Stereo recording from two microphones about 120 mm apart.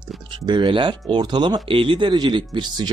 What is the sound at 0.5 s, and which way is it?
Speech, 45° right (ahead or behind).